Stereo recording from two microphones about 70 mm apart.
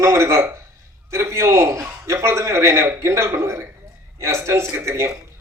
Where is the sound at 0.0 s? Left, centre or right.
Right.